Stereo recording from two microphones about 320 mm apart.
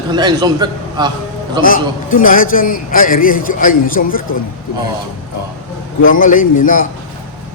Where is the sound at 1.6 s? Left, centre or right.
Left.